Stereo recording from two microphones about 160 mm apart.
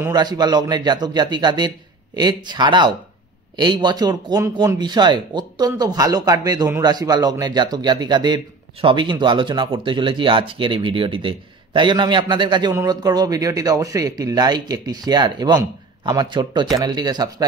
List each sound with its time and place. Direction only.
0.0 s speech: 25° right (ahead or behind)